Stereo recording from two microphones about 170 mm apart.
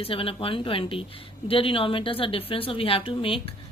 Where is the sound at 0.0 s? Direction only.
35° left (ahead or behind).